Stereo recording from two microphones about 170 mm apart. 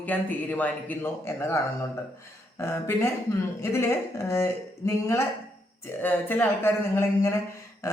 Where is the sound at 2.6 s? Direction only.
15° left (ahead or behind).